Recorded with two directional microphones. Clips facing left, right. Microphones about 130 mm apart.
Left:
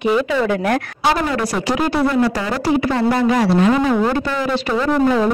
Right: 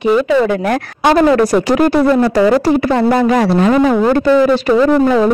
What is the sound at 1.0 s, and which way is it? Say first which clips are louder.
Speech: right 11 dB; 55° right (ahead or behind).